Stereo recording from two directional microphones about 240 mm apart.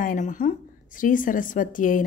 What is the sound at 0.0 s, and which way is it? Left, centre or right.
A woman's voice, left.